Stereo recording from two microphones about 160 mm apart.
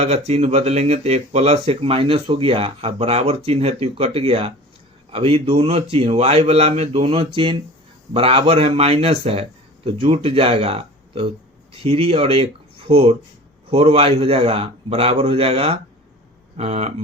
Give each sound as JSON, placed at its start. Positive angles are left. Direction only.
{"t": 0.0, "sound": "speech", "side_deg": -45}